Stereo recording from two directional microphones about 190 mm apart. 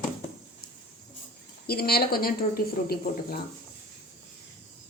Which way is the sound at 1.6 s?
55° left (ahead or behind).